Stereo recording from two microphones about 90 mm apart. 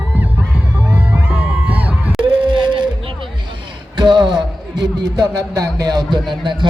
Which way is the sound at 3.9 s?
55° right (ahead or behind).